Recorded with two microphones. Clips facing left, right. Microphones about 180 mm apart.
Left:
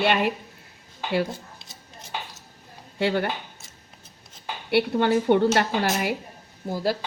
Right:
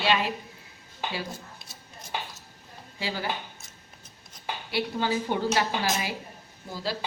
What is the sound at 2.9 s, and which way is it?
Speech, 60° left (ahead or behind).